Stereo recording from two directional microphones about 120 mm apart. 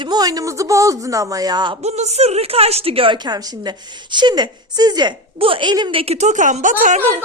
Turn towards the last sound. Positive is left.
turn(degrees=-80)